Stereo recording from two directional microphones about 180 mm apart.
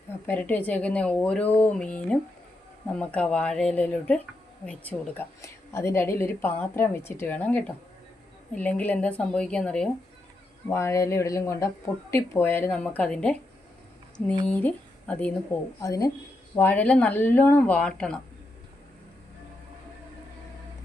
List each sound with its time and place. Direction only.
0.3 s a woman's voice: 10° left (ahead or behind)
10.7 s a woman's voice: 15° left (ahead or behind)
14.4 s speech: 10° left (ahead or behind)
15.8 s a woman's voice: 20° left (ahead or behind)